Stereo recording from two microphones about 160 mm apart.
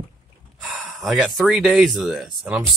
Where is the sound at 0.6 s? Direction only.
Centre (ahead or behind).